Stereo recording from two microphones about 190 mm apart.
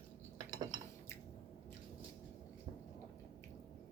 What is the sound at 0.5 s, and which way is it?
Dishes, 20° right (ahead or behind).